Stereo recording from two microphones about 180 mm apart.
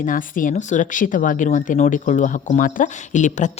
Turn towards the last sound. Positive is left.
turn(degrees=45)  # may be behind; listen again after turning